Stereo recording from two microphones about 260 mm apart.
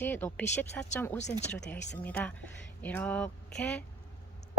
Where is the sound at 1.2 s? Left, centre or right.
Left.